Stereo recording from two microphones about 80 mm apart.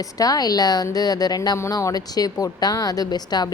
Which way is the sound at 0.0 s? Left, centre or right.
Left.